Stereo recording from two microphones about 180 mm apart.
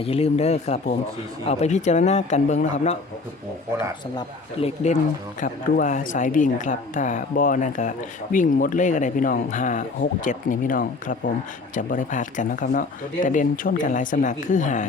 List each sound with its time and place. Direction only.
0.0 s speech: 35° left (ahead or behind)
4.6 s speech: 40° left (ahead or behind)